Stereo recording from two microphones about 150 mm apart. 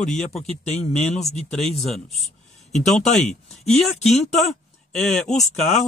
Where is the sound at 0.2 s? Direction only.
45° left (ahead or behind).